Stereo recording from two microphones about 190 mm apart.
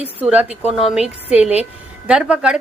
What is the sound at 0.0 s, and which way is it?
A woman's voice, 10° right (ahead or behind).